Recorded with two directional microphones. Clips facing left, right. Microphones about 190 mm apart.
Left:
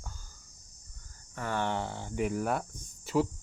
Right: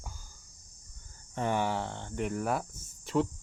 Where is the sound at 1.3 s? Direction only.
15° right (ahead or behind).